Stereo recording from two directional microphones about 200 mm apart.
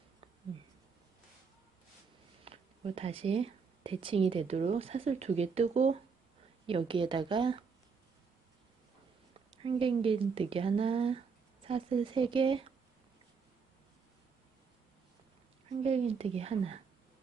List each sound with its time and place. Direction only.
2.4 s speech: 30° right (ahead or behind)
9.6 s speech: 25° right (ahead or behind)
15.8 s speech: 30° right (ahead or behind)